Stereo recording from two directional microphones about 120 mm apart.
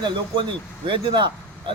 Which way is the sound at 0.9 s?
40° right (ahead or behind).